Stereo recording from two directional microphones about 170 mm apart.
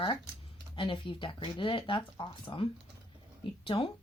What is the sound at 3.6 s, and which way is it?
Speech, 30° left (ahead or behind).